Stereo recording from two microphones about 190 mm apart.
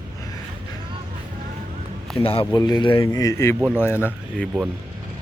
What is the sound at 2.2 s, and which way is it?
Speech, 30° left (ahead or behind).